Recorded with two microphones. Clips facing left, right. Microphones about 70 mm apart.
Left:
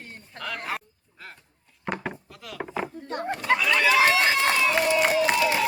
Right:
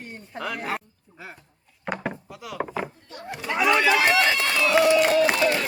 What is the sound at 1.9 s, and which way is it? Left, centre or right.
Wood, centre.